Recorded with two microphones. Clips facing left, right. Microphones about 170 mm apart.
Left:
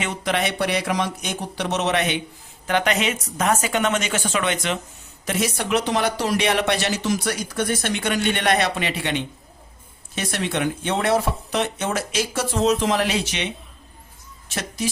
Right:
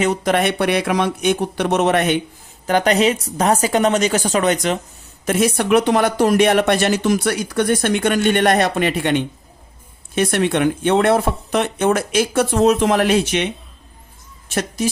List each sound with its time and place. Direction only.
0.0 s speech: 45° right (ahead or behind)
2.6 s a woman's voice: 40° right (ahead or behind)
5.2 s speech: 50° right (ahead or behind)